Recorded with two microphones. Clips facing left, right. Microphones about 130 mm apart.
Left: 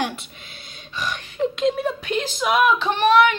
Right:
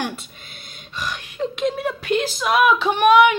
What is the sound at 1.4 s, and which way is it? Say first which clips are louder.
Speech: left 2 dB; 5° right (ahead or behind).